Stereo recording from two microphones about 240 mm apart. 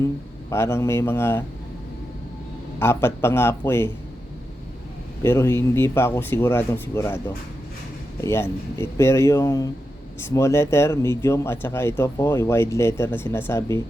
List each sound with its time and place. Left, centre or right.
0.5 s speech: centre
2.7 s speech: centre
5.2 s speech: centre